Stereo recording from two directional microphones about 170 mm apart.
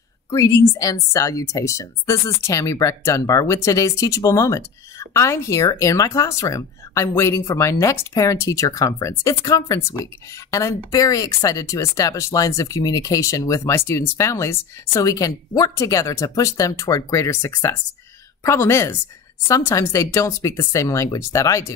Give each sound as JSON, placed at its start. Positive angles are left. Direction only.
{"t": 0.3, "sound": "a woman's voice", "side_deg": 15}